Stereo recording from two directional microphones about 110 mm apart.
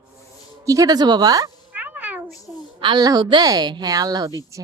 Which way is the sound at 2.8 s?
45° right (ahead or behind).